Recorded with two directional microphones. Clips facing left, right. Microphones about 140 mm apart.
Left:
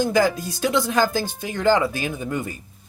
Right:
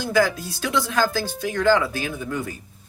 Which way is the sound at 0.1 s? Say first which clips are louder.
Left 1 dB; 20° left (ahead or behind).